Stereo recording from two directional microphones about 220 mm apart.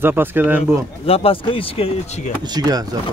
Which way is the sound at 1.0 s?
25° left (ahead or behind).